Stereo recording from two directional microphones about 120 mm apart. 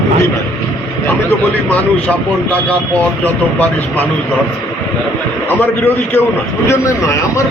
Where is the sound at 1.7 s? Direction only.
10° left (ahead or behind).